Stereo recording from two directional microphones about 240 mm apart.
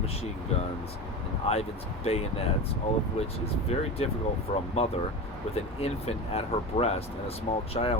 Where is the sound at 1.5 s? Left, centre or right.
Left.